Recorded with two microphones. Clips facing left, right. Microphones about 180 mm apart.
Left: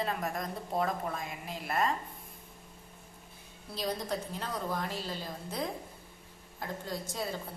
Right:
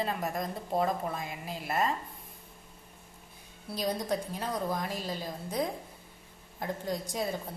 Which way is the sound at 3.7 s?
15° right (ahead or behind).